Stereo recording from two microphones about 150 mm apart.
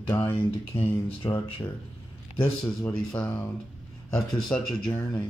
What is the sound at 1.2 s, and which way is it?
Speech, 25° left (ahead or behind).